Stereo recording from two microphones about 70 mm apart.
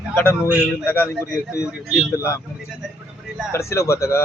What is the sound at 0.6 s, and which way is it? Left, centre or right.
Speech, left.